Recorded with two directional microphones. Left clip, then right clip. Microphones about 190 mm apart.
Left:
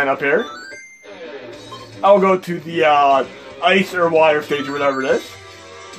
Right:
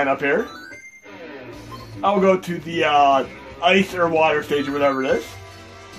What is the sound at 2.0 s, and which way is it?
A man's voice, 45° left (ahead or behind).